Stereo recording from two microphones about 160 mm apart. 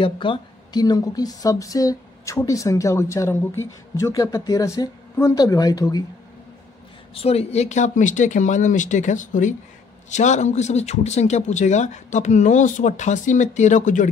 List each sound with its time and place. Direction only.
0.0 s speech: 30° left (ahead or behind)
7.2 s a man's voice: 40° left (ahead or behind)